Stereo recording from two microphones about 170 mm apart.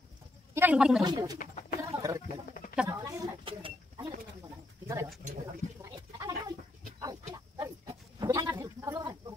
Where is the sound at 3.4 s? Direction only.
30° right (ahead or behind).